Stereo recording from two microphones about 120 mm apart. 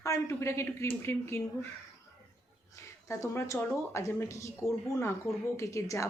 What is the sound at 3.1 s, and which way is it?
Speech, 25° left (ahead or behind).